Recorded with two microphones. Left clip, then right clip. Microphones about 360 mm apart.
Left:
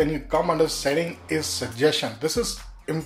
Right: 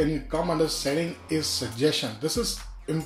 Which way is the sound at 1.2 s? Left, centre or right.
Centre.